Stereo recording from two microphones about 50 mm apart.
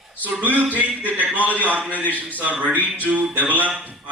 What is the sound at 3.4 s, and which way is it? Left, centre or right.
Speech, left.